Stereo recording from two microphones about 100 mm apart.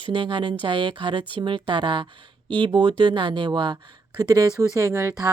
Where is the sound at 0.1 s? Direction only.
55° right (ahead or behind).